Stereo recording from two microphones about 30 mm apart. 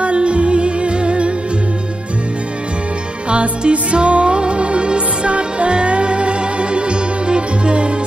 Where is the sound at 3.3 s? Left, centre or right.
Right.